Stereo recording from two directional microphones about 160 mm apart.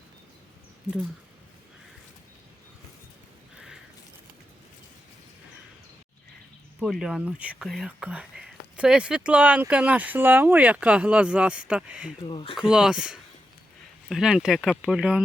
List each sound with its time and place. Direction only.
6.7 s speech: 5° right (ahead or behind)
12.2 s speech: 35° left (ahead or behind)
12.5 s speech: 5° right (ahead or behind)